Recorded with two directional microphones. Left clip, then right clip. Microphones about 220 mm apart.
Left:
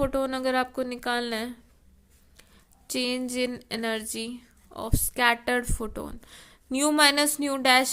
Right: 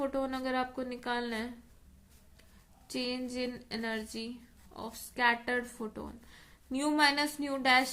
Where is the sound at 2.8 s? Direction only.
45° left (ahead or behind).